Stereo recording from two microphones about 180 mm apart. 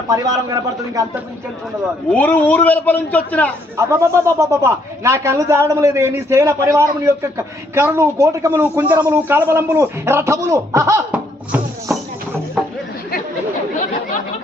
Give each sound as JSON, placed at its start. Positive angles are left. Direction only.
{"t": 0.1, "sound": "a man's voice", "side_deg": -20}
{"t": 2.1, "sound": "a man's voice", "side_deg": 10}
{"t": 3.8, "sound": "a man's voice", "side_deg": -15}